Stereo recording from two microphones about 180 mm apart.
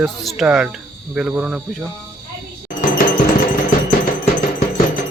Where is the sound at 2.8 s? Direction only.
50° left (ahead or behind).